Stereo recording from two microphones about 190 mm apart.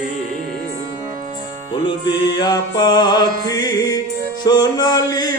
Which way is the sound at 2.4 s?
20° left (ahead or behind).